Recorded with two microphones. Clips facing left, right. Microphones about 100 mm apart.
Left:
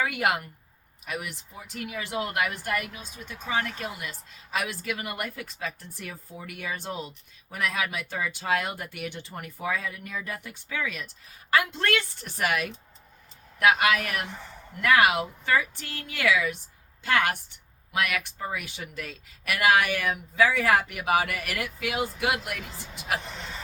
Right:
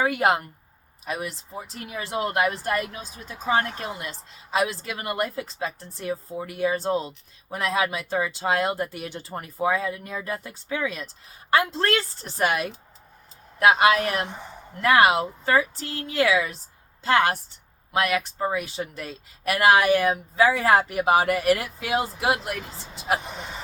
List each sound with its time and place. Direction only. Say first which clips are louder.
0.0 s a woman's voice: right 5 dB; 30° right (ahead or behind)
23.2 s speech: right 3 dB; 15° right (ahead or behind)